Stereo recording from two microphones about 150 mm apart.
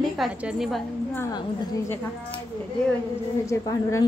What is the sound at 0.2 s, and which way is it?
Speech, centre (ahead or behind).